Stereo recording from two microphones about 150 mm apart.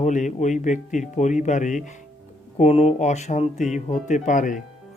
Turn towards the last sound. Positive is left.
turn(degrees=60)  # may be behind; listen again after turning